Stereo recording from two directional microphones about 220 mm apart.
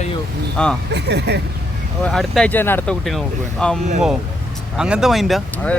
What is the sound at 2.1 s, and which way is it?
Speech, centre (ahead or behind).